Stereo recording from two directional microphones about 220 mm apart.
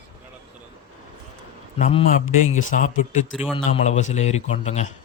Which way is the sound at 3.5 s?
30° left (ahead or behind).